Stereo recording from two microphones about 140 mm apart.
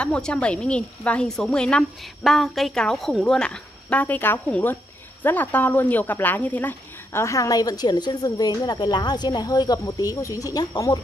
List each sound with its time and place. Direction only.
0.0 s a woman's voice: 5° left (ahead or behind); by 11.0 s 30° left (ahead or behind)